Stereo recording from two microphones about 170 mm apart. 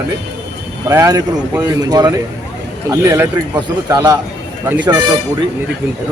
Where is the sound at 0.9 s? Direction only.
20° right (ahead or behind).